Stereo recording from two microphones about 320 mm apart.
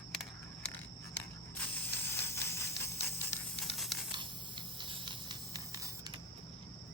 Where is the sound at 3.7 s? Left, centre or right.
Centre.